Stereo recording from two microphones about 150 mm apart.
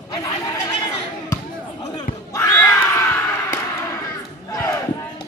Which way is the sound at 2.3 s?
15° left (ahead or behind).